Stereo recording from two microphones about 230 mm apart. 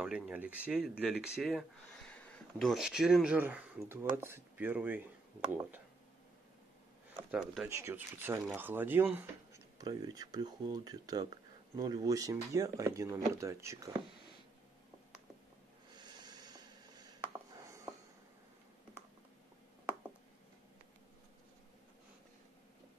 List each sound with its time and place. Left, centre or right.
0.0 s speech: centre
7.2 s speech: centre
16.0 s a sound: centre